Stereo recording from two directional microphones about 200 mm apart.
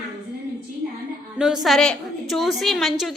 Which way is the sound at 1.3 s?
5° right (ahead or behind).